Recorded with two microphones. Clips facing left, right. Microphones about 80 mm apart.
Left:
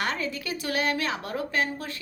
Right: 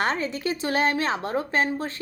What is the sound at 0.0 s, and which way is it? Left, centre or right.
A woman's voice, right.